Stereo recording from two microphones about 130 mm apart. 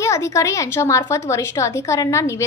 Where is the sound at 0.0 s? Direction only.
20° left (ahead or behind).